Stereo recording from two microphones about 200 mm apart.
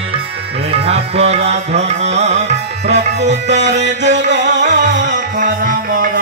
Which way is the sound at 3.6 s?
60° right (ahead or behind).